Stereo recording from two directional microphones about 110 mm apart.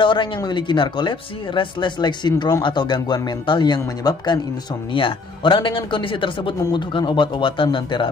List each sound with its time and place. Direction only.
0.0 s speech: 50° left (ahead or behind)
4.9 s speech: 50° left (ahead or behind)